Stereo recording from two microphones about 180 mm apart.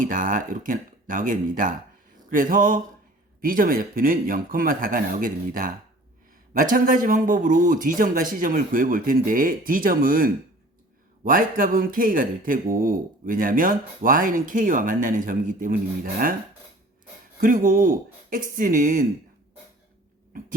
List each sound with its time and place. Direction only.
0.0 s a man's voice: 45° right (ahead or behind)
17.4 s a man's voice: 50° right (ahead or behind)